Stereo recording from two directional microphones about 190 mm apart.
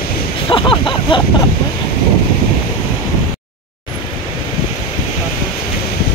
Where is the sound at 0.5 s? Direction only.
25° left (ahead or behind).